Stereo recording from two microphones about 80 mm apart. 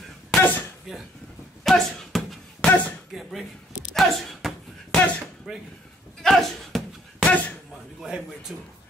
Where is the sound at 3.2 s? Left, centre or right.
Centre.